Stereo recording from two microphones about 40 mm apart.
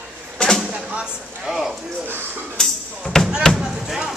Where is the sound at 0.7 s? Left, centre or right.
Right.